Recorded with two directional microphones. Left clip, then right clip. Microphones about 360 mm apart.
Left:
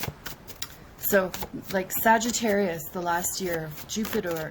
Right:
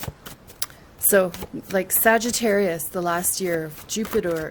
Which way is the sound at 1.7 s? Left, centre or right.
Right.